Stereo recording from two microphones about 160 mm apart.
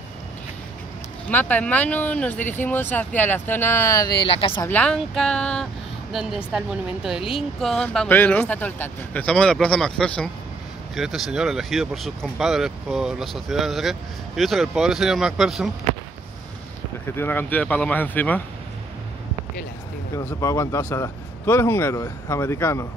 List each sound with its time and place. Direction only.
1.3 s speech: 10° left (ahead or behind); by 4.6 s 35° left (ahead or behind)
4.6 s speech: 5° left (ahead or behind)
17.1 s speech: 15° left (ahead or behind)
20.2 s speech: 20° left (ahead or behind)